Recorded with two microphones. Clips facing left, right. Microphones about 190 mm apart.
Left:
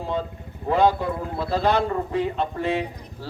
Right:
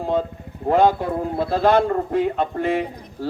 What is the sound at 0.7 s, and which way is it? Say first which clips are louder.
Speech: right 3 dB; 50° right (ahead or behind).